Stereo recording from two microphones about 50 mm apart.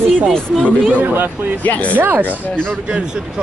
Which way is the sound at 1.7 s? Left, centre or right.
Left.